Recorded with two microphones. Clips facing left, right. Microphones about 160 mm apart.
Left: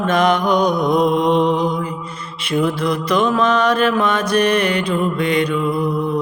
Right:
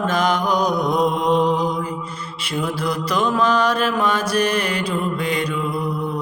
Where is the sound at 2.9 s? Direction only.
60° left (ahead or behind).